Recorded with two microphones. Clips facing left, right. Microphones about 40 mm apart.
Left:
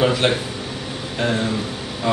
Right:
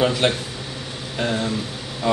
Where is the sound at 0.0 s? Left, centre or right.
Centre.